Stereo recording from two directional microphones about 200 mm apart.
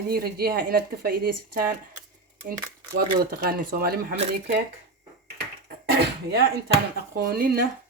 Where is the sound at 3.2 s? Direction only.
45° right (ahead or behind).